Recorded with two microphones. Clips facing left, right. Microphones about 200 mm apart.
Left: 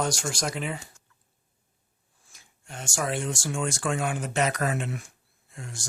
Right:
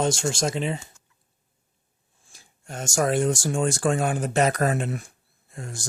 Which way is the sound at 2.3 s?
35° right (ahead or behind).